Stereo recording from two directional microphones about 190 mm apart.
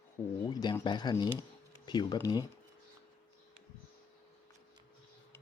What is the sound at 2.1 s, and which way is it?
Speech, 20° left (ahead or behind).